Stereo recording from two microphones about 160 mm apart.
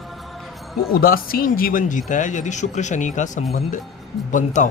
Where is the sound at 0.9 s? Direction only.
65° left (ahead or behind).